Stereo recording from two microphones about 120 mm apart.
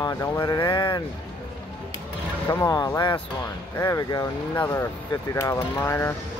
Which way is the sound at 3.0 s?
40° left (ahead or behind).